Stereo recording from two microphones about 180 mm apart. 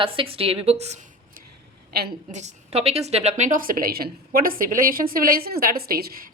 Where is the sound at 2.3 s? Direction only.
40° right (ahead or behind).